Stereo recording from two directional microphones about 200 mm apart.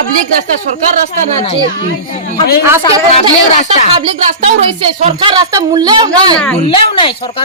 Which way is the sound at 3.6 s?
35° left (ahead or behind).